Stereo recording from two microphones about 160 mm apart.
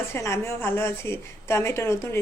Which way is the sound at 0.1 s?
15° left (ahead or behind).